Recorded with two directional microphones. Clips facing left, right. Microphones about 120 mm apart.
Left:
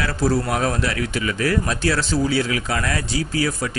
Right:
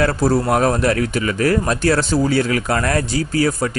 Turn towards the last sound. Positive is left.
turn(degrees=-45)  # may be behind; listen again after turning